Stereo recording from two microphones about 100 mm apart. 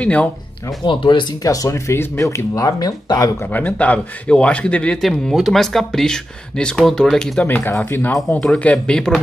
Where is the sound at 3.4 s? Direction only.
15° left (ahead or behind).